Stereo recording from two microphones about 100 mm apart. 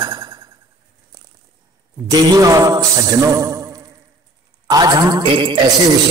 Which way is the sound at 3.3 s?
35° right (ahead or behind).